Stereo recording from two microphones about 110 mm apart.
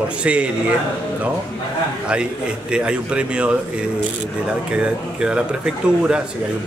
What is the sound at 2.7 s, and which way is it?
A man's voice, 10° right (ahead or behind).